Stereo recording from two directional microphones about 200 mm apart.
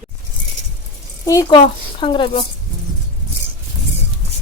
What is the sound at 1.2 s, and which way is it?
A woman's voice, 15° left (ahead or behind).